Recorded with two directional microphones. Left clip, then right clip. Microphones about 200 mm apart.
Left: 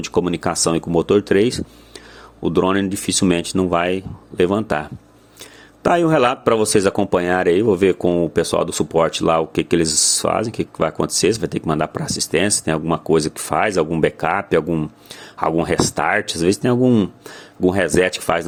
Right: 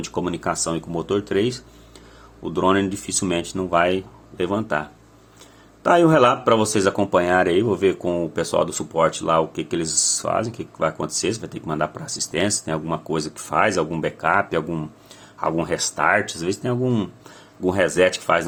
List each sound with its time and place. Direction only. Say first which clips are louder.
0.0 s speech: left 5 dB; 35° left (ahead or behind)
14.7 s speech: left 7 dB; 25° left (ahead or behind)
15.4 s speech: left 5 dB; 40° left (ahead or behind)